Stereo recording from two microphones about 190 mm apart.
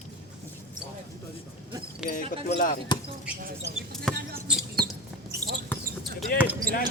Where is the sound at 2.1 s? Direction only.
45° left (ahead or behind).